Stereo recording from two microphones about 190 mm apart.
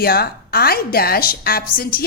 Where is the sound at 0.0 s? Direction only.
55° left (ahead or behind).